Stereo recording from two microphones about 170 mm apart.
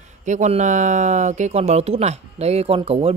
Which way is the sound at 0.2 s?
45° right (ahead or behind).